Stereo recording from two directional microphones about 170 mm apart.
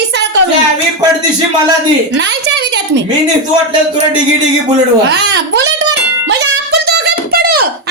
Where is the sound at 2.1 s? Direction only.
90° right.